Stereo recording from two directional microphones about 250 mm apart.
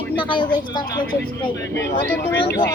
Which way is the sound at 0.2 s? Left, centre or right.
Centre.